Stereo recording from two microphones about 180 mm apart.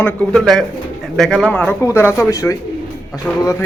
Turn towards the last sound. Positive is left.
turn(degrees=15)  # may be behind; listen again after turning